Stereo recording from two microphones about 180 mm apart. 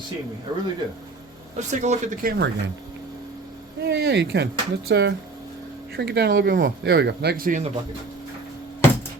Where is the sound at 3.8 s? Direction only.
65° right (ahead or behind).